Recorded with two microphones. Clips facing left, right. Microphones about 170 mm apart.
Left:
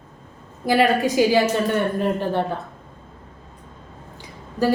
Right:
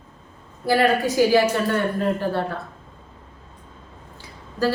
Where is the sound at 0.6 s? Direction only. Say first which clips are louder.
Left 1 dB; 15° left (ahead or behind).